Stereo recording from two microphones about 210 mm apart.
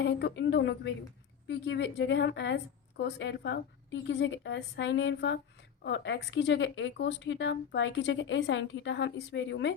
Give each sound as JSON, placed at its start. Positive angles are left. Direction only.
{"t": 0.0, "sound": "speech", "side_deg": 55}